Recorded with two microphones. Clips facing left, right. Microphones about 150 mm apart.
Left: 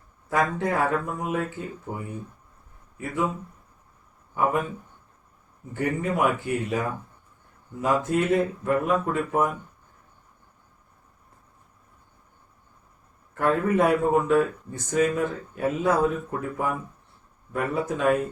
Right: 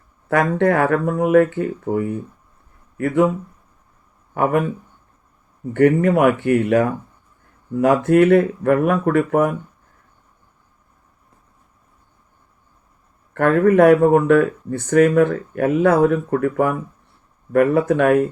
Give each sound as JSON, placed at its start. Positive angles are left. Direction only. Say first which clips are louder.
{"t": 0.3, "sound": "speech", "louder": "right 8 dB", "side_deg": -70}
{"t": 4.4, "sound": "speech", "louder": "right 5 dB", "side_deg": -65}
{"t": 5.7, "sound": "speech", "louder": "right 12 dB", "side_deg": -65}
{"t": 13.3, "sound": "speech", "louder": "right 8 dB", "side_deg": -65}